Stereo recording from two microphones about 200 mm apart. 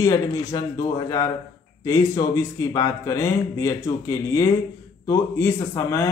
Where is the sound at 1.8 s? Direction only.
15° left (ahead or behind).